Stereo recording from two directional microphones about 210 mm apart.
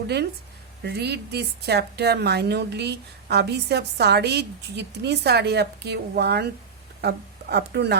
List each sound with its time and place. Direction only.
0.8 s a woman's voice: 50° right (ahead or behind)